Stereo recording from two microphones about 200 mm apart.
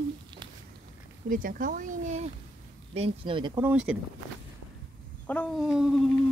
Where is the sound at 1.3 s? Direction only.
45° right (ahead or behind); by 3.6 s 25° right (ahead or behind).